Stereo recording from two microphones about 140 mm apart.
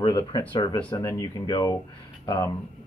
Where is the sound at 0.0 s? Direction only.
30° left (ahead or behind).